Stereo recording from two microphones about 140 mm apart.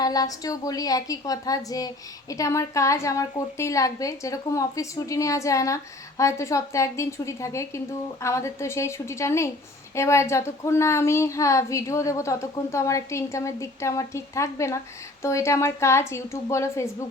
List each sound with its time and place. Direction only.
0.0 s a woman's voice: 25° left (ahead or behind)